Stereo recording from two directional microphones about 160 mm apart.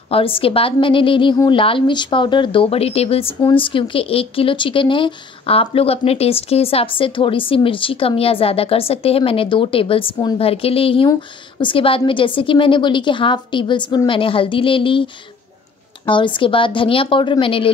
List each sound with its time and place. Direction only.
0.1 s a woman's voice: 35° left (ahead or behind)
16.1 s a woman's voice: 30° left (ahead or behind)